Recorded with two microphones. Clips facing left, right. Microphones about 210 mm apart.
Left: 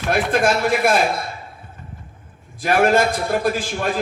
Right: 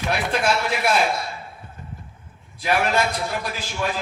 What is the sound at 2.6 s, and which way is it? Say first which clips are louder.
A man's voice: left 5 dB; 50° left (ahead or behind).